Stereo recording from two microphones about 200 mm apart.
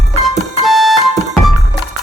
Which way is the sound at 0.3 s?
Centre (ahead or behind).